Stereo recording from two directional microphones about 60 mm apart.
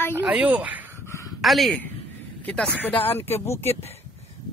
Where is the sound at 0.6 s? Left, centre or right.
Right.